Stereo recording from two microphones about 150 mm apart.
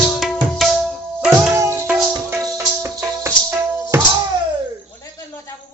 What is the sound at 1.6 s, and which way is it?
Music, 20° right (ahead or behind).